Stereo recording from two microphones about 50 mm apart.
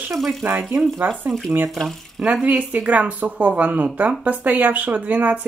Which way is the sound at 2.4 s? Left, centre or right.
Right.